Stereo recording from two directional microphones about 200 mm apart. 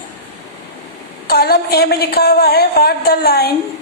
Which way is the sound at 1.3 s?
50° left (ahead or behind).